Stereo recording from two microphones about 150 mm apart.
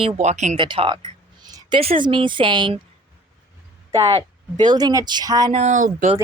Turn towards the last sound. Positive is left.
turn(degrees=-60)  # may be behind; listen again after turning